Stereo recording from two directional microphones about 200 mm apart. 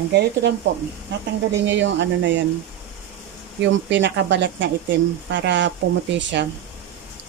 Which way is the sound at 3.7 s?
65° right (ahead or behind).